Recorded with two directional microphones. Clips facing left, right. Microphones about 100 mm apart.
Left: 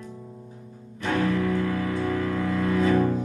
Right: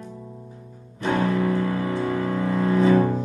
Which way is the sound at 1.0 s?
25° right (ahead or behind).